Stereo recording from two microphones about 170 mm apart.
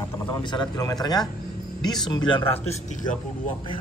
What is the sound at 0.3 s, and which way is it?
Speech, 25° left (ahead or behind).